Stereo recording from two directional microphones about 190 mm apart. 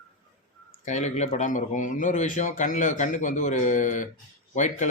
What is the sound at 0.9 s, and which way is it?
Speech, 35° left (ahead or behind).